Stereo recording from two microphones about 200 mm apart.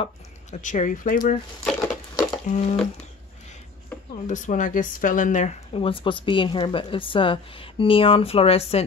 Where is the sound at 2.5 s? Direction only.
35° left (ahead or behind).